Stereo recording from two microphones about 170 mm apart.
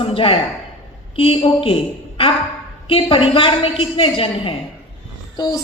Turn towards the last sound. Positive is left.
turn(degrees=25)  # may be behind; listen again after turning